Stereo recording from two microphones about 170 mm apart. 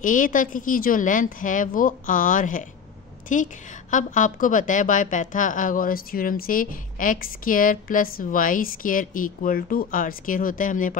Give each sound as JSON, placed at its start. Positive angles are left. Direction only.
{"t": 0.0, "sound": "a woman's voice", "side_deg": 50}